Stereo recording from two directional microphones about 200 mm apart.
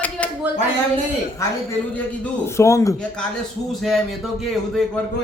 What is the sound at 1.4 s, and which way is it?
Speech, 15° left (ahead or behind).